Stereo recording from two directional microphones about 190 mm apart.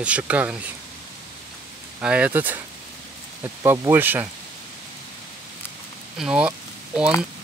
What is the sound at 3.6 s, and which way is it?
Speech, 15° right (ahead or behind).